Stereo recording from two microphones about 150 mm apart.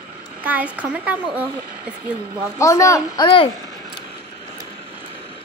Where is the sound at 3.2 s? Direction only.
35° left (ahead or behind).